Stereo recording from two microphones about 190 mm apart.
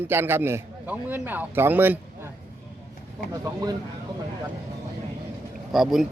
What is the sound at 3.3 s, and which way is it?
Speech, 20° right (ahead or behind).